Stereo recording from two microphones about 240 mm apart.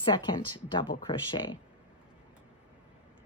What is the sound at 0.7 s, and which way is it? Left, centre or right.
Speech, left.